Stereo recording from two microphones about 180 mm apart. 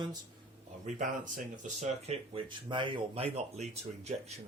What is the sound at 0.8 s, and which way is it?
Speech, 45° right (ahead or behind).